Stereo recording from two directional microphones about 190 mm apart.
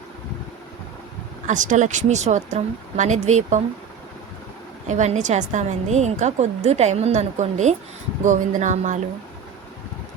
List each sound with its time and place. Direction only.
1.5 s a woman's voice: 40° right (ahead or behind)
4.9 s a woman's voice: 40° right (ahead or behind)